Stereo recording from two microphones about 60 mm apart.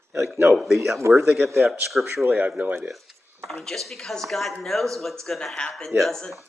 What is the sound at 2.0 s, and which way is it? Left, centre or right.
Speech, right.